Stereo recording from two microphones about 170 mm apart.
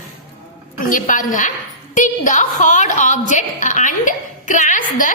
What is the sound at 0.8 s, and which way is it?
A woman's voice, 55° left (ahead or behind).